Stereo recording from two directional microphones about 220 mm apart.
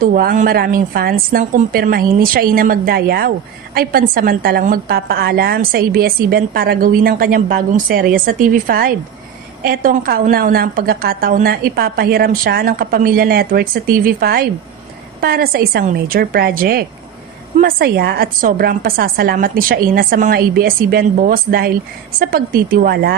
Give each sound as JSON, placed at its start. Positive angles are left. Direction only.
{"t": 0.0, "sound": "a woman's voice", "side_deg": -40}